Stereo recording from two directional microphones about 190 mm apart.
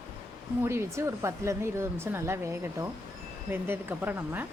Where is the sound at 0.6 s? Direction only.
15° right (ahead or behind).